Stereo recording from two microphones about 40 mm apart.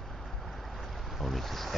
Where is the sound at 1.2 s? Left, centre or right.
Centre.